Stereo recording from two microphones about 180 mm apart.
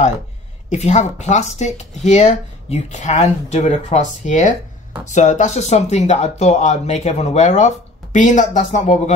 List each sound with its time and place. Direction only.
0.7 s speech: 40° left (ahead or behind)